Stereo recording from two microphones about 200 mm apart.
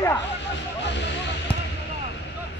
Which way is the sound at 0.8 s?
60° left (ahead or behind).